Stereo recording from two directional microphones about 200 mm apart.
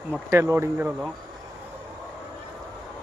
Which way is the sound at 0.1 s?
15° right (ahead or behind).